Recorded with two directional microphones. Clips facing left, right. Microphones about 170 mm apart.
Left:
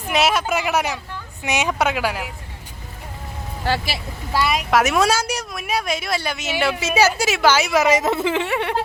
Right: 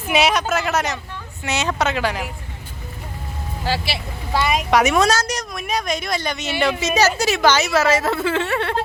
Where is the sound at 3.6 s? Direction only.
55° left (ahead or behind).